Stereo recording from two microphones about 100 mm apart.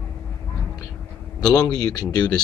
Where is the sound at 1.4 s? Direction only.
40° left (ahead or behind).